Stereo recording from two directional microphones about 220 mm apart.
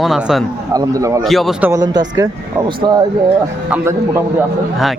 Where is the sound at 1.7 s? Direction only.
15° right (ahead or behind).